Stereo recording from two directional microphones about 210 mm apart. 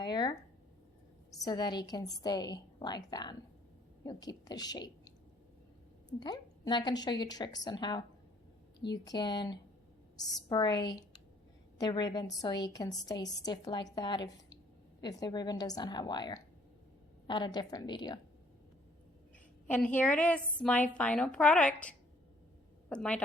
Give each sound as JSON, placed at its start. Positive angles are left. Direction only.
{"t": 0.0, "sound": "a sound", "side_deg": 20}
{"t": 1.4, "sound": "a woman's voice", "side_deg": 20}
{"t": 6.1, "sound": "a woman's voice", "side_deg": 20}
{"t": 19.6, "sound": "a woman's voice", "side_deg": 5}